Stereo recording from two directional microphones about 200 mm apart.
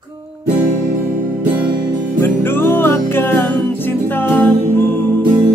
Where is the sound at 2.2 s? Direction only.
10° left (ahead or behind).